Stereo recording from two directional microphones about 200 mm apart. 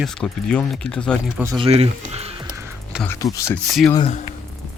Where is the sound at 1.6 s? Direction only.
30° right (ahead or behind).